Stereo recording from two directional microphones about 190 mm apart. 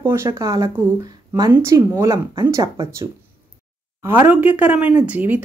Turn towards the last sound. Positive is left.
turn(degrees=-10)  # may be behind; listen again after turning